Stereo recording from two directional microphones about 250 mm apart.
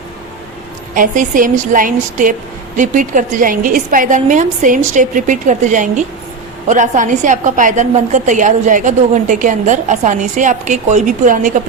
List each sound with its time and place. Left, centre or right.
0.9 s a woman's voice: right